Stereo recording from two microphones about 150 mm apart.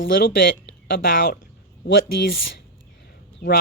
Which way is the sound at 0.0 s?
85° left.